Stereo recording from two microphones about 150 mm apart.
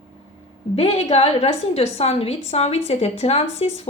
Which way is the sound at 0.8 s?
40° left (ahead or behind).